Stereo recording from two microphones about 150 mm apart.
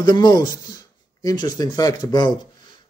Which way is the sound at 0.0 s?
25° left (ahead or behind).